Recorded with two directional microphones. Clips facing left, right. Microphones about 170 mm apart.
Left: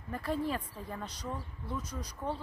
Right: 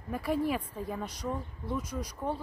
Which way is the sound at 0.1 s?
10° right (ahead or behind).